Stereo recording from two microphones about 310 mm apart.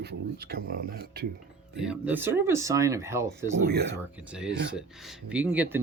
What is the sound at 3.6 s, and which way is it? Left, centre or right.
Speech, right.